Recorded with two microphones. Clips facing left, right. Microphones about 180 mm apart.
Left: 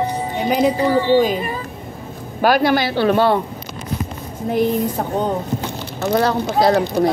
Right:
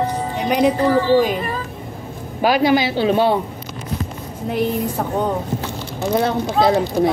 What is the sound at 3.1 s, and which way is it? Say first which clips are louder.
Speech: left 1 dB; 15° right (ahead or behind).